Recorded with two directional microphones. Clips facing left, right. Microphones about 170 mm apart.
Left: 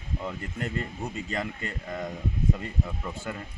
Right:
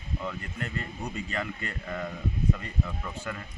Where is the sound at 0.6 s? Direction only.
35° left (ahead or behind).